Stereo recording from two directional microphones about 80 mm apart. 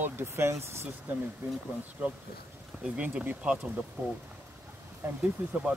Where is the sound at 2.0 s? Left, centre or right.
Centre.